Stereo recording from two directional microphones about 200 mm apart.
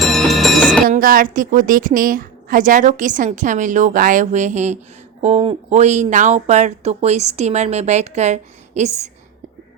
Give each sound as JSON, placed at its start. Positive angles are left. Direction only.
{"t": 0.0, "sound": "music", "side_deg": 0}
{"t": 0.9, "sound": "a woman's voice", "side_deg": -45}